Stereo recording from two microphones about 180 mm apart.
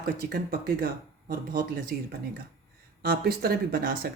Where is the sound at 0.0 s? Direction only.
55° right (ahead or behind).